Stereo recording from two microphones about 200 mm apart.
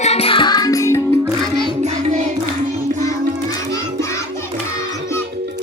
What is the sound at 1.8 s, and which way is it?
Music, 35° right (ahead or behind).